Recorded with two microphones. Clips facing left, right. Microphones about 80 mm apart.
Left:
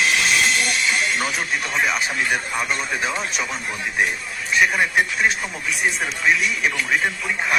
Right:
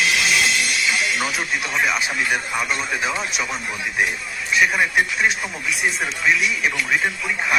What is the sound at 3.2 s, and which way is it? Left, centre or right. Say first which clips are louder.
Speech: even; left.